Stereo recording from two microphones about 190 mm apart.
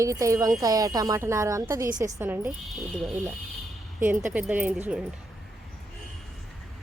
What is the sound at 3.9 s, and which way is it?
A woman's voice, 10° right (ahead or behind).